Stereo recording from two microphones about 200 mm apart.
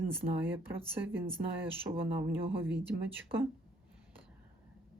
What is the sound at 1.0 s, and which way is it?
Speech, 10° right (ahead or behind).